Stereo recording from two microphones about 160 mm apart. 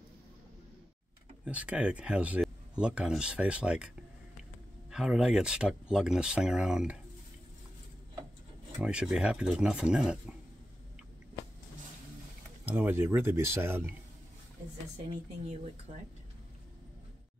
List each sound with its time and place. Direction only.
1.4 s speech: 10° right (ahead or behind)
4.9 s speech: 5° right (ahead or behind)
8.7 s speech: 5° right (ahead or behind)
12.6 s speech: 10° right (ahead or behind)
15.4 s speech: 45° right (ahead or behind)